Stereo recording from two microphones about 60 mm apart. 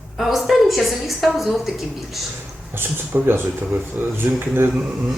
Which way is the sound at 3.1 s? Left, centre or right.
Right.